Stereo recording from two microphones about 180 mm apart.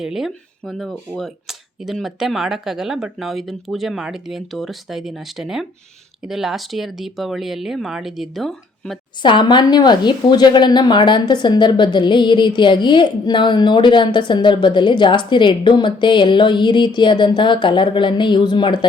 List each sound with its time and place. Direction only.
0.0 s speech: centre (ahead or behind)
9.2 s a woman's voice: 25° left (ahead or behind)